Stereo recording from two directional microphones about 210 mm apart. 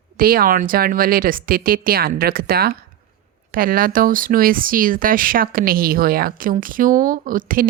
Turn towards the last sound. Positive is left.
turn(degrees=-40)  # may be behind; listen again after turning